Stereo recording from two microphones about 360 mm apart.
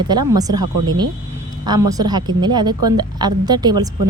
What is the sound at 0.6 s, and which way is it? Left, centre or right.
Speech, right.